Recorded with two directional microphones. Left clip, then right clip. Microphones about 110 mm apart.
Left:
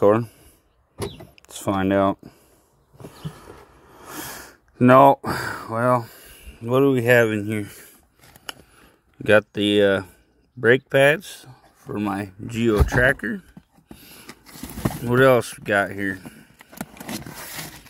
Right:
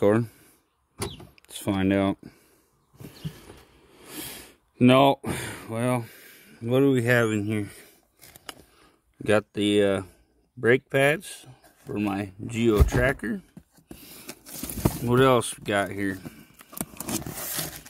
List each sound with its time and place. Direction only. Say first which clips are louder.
1.3 s speech: left 6 dB; 30° right (ahead or behind)
3.0 s a sound: left 4 dB; 35° right (ahead or behind)
6.7 s speech: left 5 dB; 25° right (ahead or behind)
9.2 s speech: left 6 dB; 5° right (ahead or behind)
13.8 s beatboxing: left 1 dB; 35° right (ahead or behind)
15.0 s speech: left 4 dB; 15° right (ahead or behind); by 16.4 s 30° right (ahead or behind)